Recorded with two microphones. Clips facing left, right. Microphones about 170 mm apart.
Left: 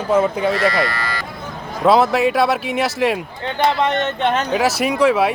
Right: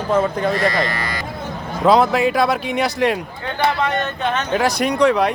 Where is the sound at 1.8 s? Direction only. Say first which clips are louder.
Even; centre (ahead or behind).